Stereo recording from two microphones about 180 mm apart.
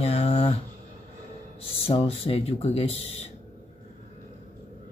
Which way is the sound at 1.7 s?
30° left (ahead or behind).